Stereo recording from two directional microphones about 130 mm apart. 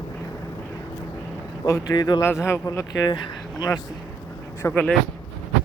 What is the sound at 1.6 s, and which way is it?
Speech, 25° left (ahead or behind).